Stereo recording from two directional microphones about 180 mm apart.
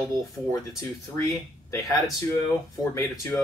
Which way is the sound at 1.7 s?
20° left (ahead or behind).